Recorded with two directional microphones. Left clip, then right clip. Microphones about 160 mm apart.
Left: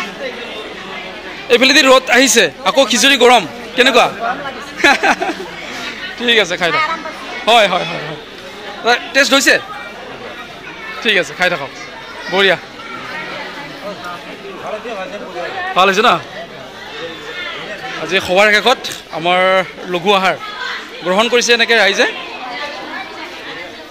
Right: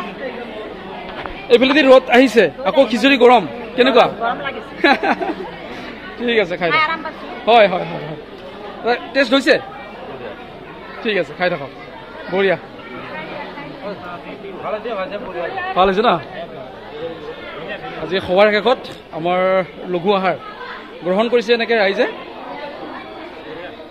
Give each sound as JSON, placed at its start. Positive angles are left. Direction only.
{"t": 1.5, "sound": "a man's voice", "side_deg": 0}
{"t": 8.8, "sound": "a man's voice", "side_deg": 0}
{"t": 11.0, "sound": "a man's voice", "side_deg": 5}
{"t": 15.7, "sound": "a man's voice", "side_deg": 0}
{"t": 18.0, "sound": "a man's voice", "side_deg": 0}